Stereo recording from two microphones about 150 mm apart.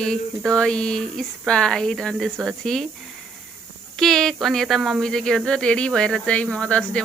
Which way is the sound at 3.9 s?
5° left (ahead or behind).